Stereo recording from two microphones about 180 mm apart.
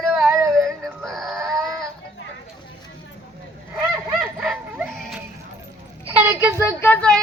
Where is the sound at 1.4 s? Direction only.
15° right (ahead or behind).